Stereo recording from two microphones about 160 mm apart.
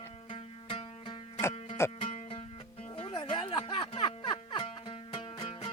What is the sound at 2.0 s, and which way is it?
Music, 35° left (ahead or behind).